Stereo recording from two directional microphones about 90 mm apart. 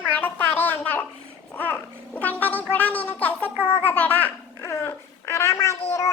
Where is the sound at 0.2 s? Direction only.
20° left (ahead or behind).